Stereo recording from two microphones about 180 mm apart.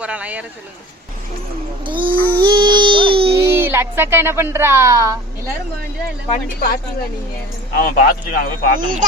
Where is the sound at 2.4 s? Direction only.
25° right (ahead or behind).